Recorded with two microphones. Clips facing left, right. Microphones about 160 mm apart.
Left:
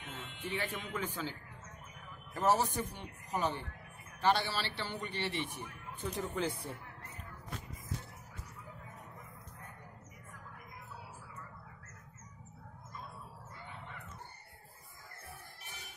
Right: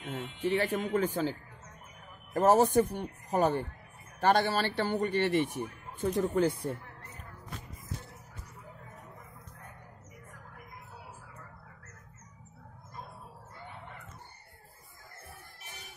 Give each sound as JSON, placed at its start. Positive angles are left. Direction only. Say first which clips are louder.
{"t": 0.0, "sound": "a sound", "louder": "right 9 dB", "side_deg": -40}
{"t": 0.4, "sound": "speech", "louder": "right 10 dB", "side_deg": -40}
{"t": 2.3, "sound": "speech", "louder": "right 8 dB", "side_deg": -50}